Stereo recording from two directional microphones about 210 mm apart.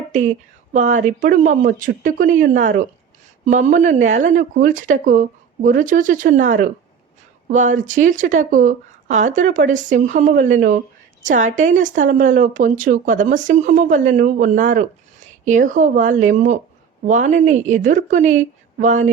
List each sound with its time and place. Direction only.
0.7 s speech: 35° right (ahead or behind)